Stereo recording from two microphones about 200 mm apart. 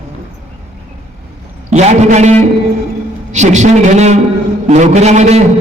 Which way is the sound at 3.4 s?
35° right (ahead or behind).